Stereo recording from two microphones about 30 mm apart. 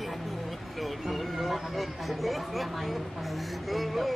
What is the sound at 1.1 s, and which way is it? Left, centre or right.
Speech, centre.